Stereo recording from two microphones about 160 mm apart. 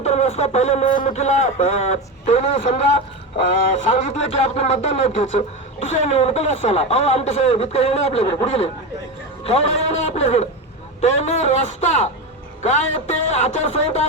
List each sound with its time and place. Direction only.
0.0 s a sound: 45° left (ahead or behind)
1.0 s a man's voice: 45° left (ahead or behind)
4.0 s a man's voice: 45° left (ahead or behind)